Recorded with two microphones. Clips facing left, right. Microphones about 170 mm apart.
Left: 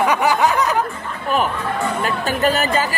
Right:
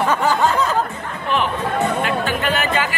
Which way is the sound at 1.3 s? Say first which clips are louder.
Even; 40° left (ahead or behind).